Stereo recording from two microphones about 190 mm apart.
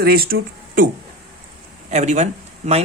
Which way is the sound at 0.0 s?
50° right (ahead or behind).